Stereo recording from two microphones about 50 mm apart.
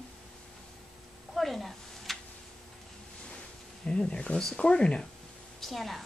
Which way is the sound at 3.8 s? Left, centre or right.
Centre.